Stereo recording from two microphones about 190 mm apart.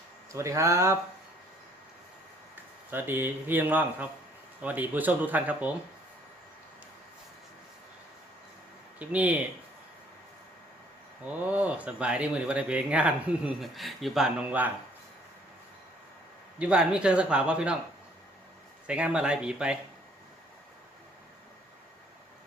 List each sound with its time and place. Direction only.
0.3 s speech: 15° right (ahead or behind)
2.9 s speech: 10° right (ahead or behind)
9.0 s speech: 10° right (ahead or behind)
11.4 s speech: 5° right (ahead or behind)
16.6 s speech: 5° right (ahead or behind)
18.9 s speech: 5° right (ahead or behind)